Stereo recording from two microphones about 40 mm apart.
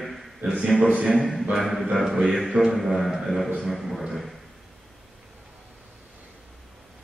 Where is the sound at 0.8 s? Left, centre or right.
Right.